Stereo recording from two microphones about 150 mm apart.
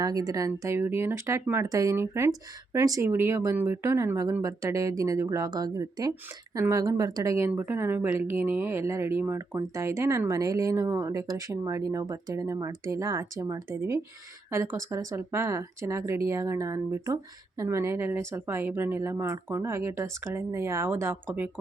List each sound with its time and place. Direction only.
0.0 s speech: 25° right (ahead or behind)